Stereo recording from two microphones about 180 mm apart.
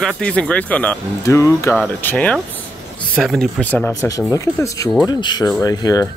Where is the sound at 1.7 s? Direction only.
5° left (ahead or behind).